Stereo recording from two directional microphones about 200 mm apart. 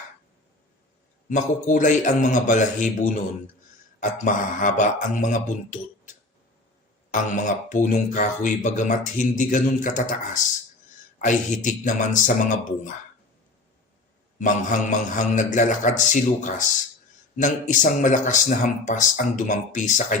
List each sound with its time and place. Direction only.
1.3 s speech: 40° left (ahead or behind)
4.0 s speech: 40° left (ahead or behind)
14.3 s speech: 40° left (ahead or behind)